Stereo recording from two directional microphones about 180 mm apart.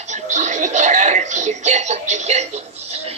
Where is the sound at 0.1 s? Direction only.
40° right (ahead or behind).